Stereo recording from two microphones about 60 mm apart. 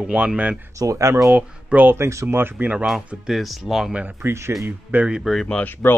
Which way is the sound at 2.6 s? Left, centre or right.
Right.